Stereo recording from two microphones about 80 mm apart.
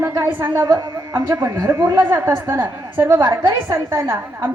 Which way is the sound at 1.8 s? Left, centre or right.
Right.